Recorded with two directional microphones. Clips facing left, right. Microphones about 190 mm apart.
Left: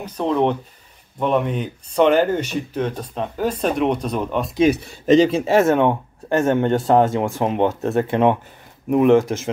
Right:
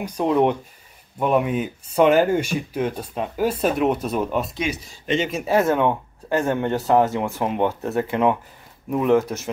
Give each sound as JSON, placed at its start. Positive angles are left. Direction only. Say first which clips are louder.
{"t": 0.0, "sound": "speech", "louder": "even", "side_deg": -10}
{"t": 4.6, "sound": "speech", "louder": "left 10 dB", "side_deg": 60}
{"t": 5.0, "sound": "speech", "louder": "left 9 dB", "side_deg": 35}